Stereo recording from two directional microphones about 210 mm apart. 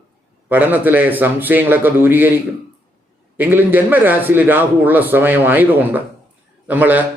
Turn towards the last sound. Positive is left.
turn(degrees=-10)  # may be behind; listen again after turning